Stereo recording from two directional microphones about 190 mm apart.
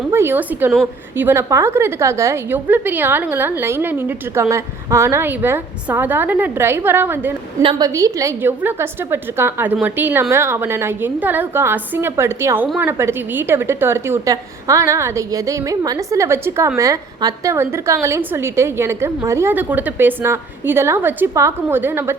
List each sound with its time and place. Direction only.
0.1 s a woman's voice: 10° right (ahead or behind)
7.6 s a woman's voice: 30° right (ahead or behind)
7.9 s a woman's voice: 15° right (ahead or behind)